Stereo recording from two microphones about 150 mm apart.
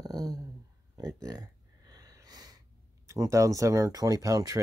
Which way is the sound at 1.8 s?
25° right (ahead or behind).